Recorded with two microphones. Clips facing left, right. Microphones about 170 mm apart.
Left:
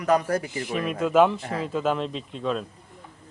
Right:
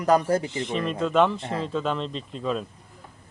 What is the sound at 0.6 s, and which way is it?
Speech, 5° left (ahead or behind).